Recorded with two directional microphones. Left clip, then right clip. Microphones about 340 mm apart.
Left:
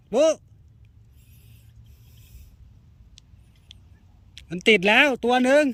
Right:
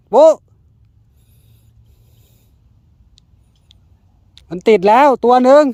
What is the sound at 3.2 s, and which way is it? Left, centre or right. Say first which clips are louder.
Vehicle: right 1 dB; centre.